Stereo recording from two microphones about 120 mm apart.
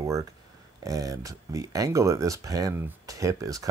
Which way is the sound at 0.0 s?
30° right (ahead or behind).